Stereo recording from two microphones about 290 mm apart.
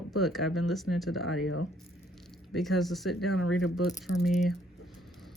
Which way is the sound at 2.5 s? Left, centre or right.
Centre.